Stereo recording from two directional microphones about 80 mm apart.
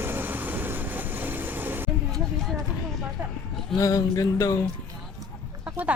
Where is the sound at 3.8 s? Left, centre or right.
Left.